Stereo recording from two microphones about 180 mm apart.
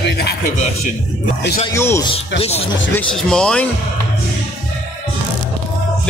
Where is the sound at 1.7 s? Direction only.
15° left (ahead or behind).